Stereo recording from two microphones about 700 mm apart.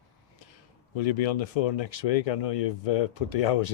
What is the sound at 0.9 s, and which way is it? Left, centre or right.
Speech, left.